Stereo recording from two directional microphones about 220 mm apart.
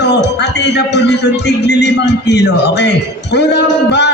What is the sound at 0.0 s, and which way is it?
A man's voice, 50° left (ahead or behind).